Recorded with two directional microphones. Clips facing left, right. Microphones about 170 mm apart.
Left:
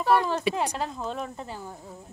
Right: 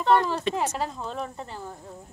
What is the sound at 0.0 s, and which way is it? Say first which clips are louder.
Speech: right 1 dB; 5° left (ahead or behind).